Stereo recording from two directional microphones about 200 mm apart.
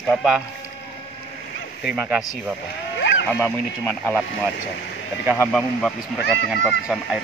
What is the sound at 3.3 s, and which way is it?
Speech, 10° left (ahead or behind).